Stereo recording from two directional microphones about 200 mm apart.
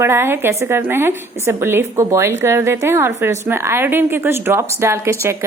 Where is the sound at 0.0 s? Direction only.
10° right (ahead or behind).